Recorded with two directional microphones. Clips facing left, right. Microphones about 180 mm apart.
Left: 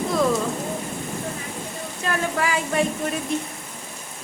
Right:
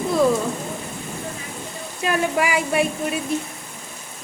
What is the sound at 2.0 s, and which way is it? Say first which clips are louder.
Speech: right 4 dB; 15° right (ahead or behind).